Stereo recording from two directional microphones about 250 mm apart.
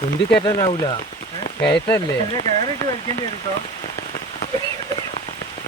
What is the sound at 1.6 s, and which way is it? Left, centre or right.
Speech, centre.